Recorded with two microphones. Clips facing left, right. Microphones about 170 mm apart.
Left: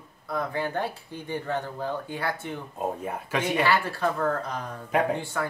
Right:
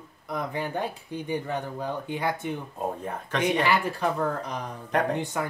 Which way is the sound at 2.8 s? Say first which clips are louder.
Left 1 dB; 5° left (ahead or behind).